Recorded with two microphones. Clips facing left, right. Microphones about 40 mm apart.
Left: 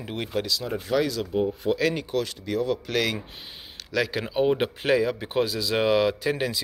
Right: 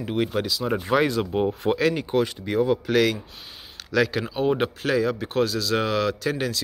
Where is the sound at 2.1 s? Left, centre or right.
Right.